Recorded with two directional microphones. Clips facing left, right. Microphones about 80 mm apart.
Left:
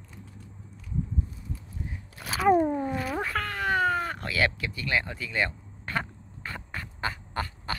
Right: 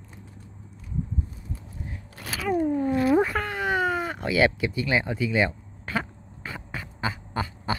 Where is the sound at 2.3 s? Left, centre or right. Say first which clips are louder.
Left 3 dB; left.